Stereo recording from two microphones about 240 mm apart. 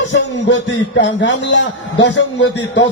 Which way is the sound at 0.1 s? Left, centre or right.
Left.